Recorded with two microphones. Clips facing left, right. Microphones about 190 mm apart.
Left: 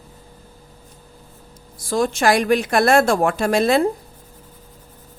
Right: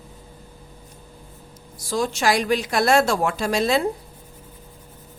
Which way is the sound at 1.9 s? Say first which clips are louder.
Left 4 dB; 55° left (ahead or behind).